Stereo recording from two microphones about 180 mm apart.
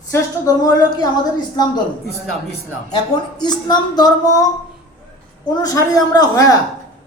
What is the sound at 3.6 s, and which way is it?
Speech, 25° left (ahead or behind).